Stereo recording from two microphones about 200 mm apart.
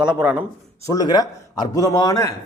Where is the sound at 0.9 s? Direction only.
20° left (ahead or behind).